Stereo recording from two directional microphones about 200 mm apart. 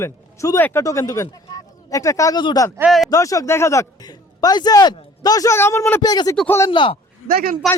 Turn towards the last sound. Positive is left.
turn(degrees=-45)  # may be behind; listen again after turning